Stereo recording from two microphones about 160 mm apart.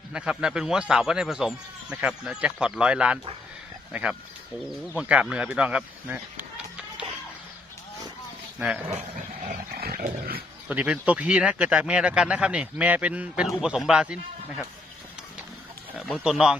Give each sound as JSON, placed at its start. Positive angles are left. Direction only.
{"t": 0.1, "sound": "speech", "side_deg": -5}
{"t": 8.5, "sound": "speech", "side_deg": -5}
{"t": 9.5, "sound": "dog", "side_deg": -70}
{"t": 10.7, "sound": "speech", "side_deg": -10}
{"t": 16.0, "sound": "speech", "side_deg": 0}